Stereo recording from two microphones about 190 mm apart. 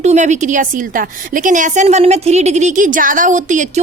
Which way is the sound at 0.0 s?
40° right (ahead or behind).